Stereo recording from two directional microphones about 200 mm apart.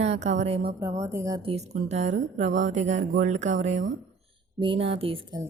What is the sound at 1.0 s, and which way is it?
Speech, 15° right (ahead or behind).